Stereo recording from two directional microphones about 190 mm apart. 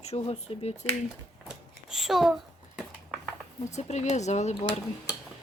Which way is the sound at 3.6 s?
35° left (ahead or behind).